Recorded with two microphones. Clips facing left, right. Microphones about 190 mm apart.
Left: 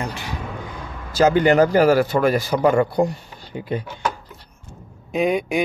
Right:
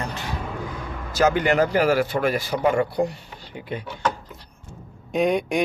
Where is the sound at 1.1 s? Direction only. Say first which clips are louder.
Left 4 dB; 30° left (ahead or behind).